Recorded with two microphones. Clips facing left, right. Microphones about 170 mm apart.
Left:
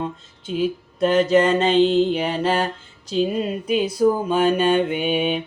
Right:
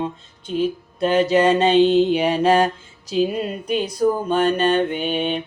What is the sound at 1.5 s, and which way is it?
Mantra, 15° right (ahead or behind).